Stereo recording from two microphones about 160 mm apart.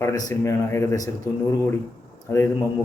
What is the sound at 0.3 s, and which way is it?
A man's voice, 20° left (ahead or behind).